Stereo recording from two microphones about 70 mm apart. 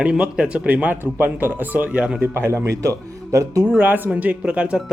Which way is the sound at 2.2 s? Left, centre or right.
Right.